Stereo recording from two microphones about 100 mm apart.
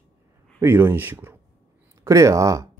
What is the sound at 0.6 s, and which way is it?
Speech, 20° right (ahead or behind).